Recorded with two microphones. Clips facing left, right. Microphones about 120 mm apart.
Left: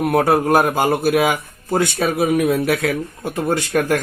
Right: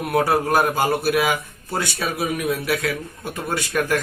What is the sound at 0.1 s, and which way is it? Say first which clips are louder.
Speech: left 2 dB; 45° left (ahead or behind).